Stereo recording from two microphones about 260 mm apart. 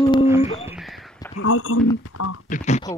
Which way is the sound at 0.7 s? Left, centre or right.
Centre.